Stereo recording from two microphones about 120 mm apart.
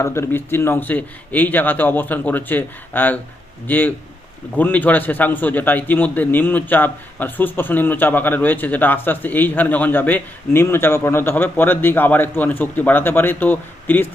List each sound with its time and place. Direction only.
0.0 s a man's voice: 20° left (ahead or behind)